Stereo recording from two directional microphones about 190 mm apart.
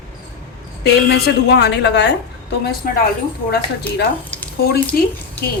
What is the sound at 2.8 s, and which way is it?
A woman's voice, 50° left (ahead or behind).